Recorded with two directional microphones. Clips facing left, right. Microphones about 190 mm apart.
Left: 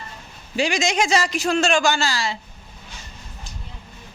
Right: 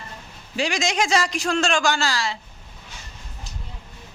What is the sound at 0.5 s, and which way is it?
A man's voice, centre (ahead or behind).